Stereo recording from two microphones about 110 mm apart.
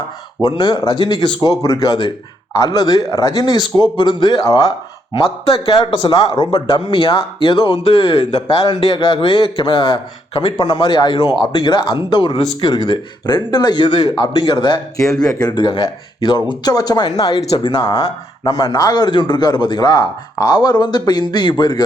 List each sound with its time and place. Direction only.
0.4 s speech: 45° left (ahead or behind)
1.5 s a man's voice: 30° left (ahead or behind)
5.1 s a man's voice: 60° left (ahead or behind); by 21.8 s 40° left (ahead or behind)